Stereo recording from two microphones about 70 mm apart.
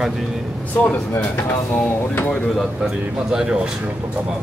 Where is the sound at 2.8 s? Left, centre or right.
Centre.